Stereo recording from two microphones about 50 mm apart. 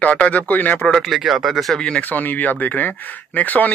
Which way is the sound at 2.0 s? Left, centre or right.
Left.